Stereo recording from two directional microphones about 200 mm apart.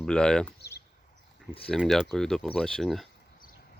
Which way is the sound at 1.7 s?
Centre (ahead or behind).